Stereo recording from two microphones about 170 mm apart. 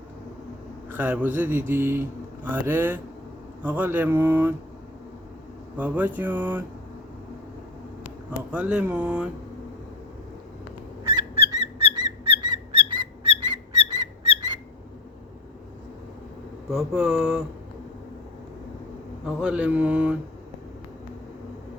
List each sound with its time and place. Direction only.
0.9 s speech: 10° right (ahead or behind)
5.7 s speech: 10° right (ahead or behind)
8.5 s speech: 10° right (ahead or behind)
11.5 s squeak: 25° right (ahead or behind)
16.6 s speech: 5° right (ahead or behind)
19.2 s speech: 5° right (ahead or behind)